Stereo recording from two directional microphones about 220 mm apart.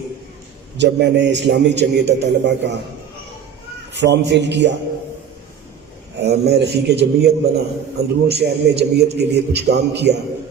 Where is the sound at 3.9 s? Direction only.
50° right (ahead or behind).